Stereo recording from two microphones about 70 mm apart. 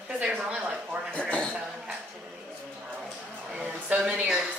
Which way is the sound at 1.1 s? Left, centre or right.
Centre.